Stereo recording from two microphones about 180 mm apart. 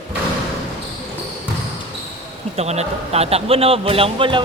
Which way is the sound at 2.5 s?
35° right (ahead or behind).